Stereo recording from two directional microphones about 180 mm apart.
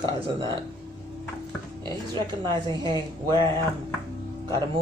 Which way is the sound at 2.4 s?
25° right (ahead or behind).